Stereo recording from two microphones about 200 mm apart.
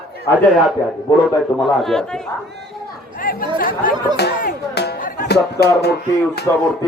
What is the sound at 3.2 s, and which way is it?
Speech, 45° left (ahead or behind).